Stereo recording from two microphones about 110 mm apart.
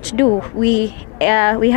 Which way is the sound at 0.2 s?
25° left (ahead or behind).